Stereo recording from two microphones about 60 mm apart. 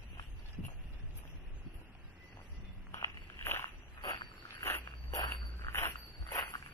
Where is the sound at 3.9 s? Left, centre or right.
Left.